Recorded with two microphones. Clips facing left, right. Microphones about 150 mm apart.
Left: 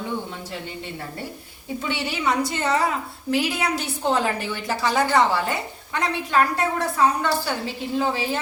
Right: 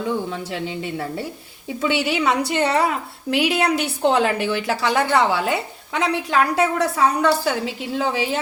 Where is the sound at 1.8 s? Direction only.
90° right.